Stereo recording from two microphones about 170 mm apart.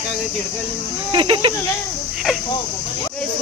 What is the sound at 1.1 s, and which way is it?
Speech, 30° right (ahead or behind).